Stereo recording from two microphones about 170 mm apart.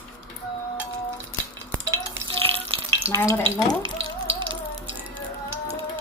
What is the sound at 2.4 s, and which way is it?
Frying, 35° right (ahead or behind).